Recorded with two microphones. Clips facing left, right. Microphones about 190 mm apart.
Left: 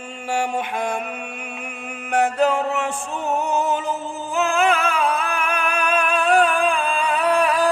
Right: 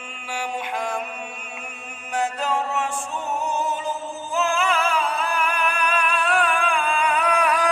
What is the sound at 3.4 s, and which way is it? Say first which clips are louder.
Music: left 4 dB; 60° left (ahead or behind).